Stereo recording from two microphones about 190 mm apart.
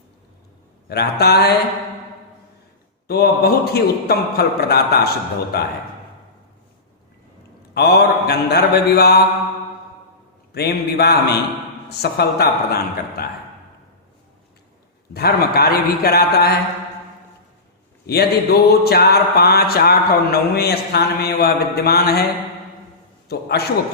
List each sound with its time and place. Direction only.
0.9 s mantra: 60° left (ahead or behind)
3.1 s mantra: 55° left (ahead or behind)
7.7 s mantra: 60° left (ahead or behind)
10.5 s mantra: 55° left (ahead or behind)
15.1 s mantra: 55° left (ahead or behind)
18.0 s mantra: 55° left (ahead or behind)
23.3 s mantra: 55° left (ahead or behind)